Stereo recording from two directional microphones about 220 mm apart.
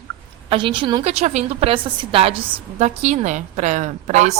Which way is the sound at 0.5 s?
20° right (ahead or behind).